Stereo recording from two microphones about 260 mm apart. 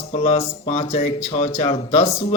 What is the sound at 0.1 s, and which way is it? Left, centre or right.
Speech, left.